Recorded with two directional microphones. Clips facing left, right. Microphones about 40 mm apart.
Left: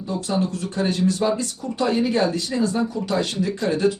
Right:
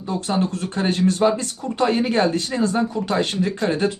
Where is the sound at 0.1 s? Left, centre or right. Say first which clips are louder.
Right 2 dB; right.